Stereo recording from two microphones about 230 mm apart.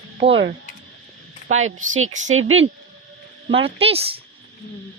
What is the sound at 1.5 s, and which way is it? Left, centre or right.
A woman's voice, right.